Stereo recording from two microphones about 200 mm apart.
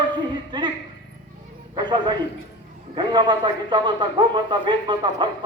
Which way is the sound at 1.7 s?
25° right (ahead or behind).